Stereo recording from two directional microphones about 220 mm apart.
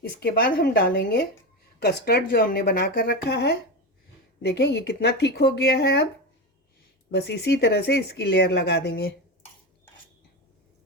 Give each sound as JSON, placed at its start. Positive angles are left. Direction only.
{"t": 0.0, "sound": "speech", "side_deg": 45}
{"t": 7.1, "sound": "speech", "side_deg": 50}